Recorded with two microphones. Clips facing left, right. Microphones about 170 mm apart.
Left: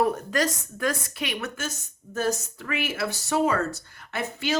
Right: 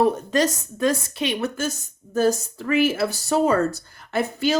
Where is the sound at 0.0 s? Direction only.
25° right (ahead or behind).